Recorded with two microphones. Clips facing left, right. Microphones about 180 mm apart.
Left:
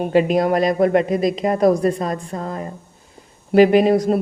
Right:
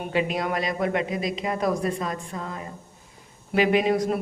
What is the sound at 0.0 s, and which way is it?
A woman's voice, 45° left (ahead or behind).